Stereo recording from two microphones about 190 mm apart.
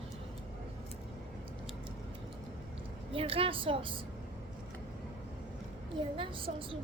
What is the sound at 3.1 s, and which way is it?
Speech, 30° right (ahead or behind).